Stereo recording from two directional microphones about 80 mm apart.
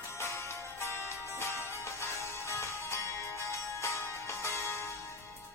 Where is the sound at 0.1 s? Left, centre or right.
Left.